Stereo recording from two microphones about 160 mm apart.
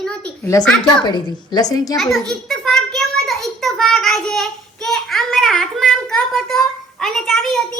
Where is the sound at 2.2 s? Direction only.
Centre (ahead or behind).